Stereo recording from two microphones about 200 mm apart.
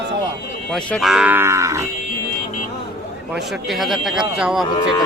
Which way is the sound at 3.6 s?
Centre (ahead or behind).